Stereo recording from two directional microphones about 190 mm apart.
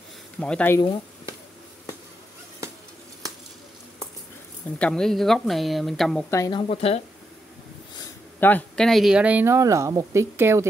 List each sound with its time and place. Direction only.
0.4 s speech: 5° left (ahead or behind)
4.7 s speech: 5° left (ahead or behind)
6.3 s speech: 20° left (ahead or behind)
8.4 s speech: 10° left (ahead or behind); by 10.7 s 15° right (ahead or behind)